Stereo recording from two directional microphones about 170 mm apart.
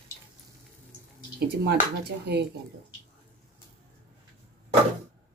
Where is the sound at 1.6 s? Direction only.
70° right (ahead or behind).